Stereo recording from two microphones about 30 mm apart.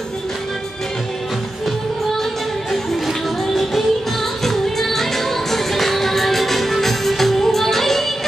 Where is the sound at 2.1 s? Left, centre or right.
Centre.